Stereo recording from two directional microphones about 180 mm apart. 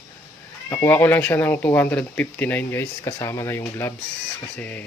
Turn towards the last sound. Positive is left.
turn(degrees=10)  # may be behind; listen again after turning